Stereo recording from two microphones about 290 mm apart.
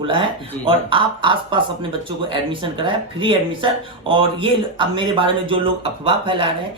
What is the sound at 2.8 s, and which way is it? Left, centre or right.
Speech, centre.